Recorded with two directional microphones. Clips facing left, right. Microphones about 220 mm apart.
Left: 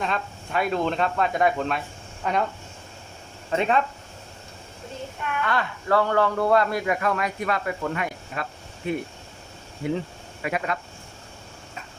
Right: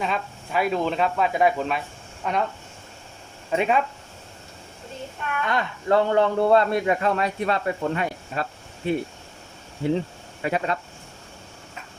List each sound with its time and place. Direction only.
0.0 s speech: 5° right (ahead or behind)
3.5 s speech: 10° right (ahead or behind)
5.5 s a man's voice: 20° right (ahead or behind)
10.4 s speech: 30° right (ahead or behind)